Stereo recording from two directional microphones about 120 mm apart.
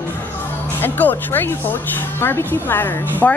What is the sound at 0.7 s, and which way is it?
A woman's voice, 15° left (ahead or behind).